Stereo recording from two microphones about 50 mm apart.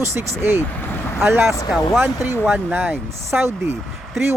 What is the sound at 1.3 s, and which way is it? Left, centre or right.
Speech, right.